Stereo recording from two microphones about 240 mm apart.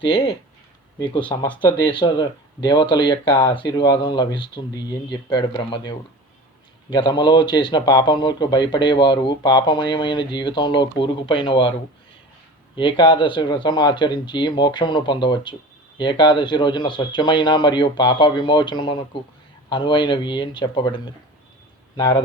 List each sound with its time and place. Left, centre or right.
0.9 s a man's voice: centre
12.7 s a man's voice: centre